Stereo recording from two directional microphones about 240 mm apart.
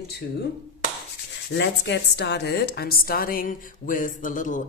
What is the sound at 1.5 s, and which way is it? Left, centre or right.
A woman's voice, left.